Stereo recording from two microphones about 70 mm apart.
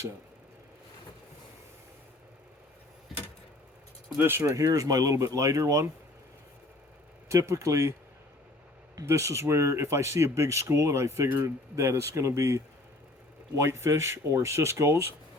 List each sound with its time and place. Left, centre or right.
4.2 s speech: right
4.5 s speech: right
7.3 s speech: right
9.0 s speech: right